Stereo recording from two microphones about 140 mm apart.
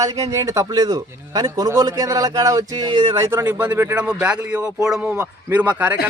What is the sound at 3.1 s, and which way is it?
Speech, 20° right (ahead or behind).